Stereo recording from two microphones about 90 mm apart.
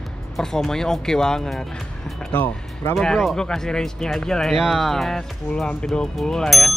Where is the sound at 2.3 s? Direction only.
25° left (ahead or behind).